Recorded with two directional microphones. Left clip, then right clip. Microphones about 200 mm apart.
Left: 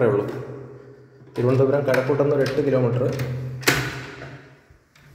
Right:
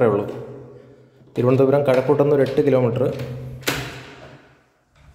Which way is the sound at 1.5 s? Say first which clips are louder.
Right 3 dB; 40° right (ahead or behind).